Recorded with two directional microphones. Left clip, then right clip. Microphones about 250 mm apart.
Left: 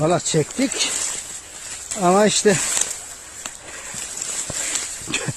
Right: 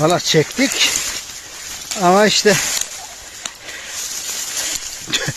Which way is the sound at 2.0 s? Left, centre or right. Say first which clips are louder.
Right 4 dB; centre.